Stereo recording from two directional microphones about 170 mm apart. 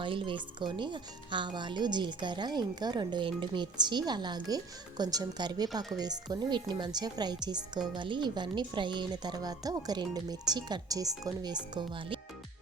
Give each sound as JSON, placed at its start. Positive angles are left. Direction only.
{"t": 0.0, "sound": "a woman's voice", "side_deg": -30}